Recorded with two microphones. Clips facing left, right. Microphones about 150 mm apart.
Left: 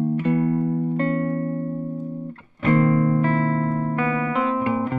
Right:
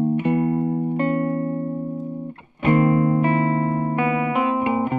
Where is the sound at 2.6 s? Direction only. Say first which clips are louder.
Right 1 dB; 15° right (ahead or behind).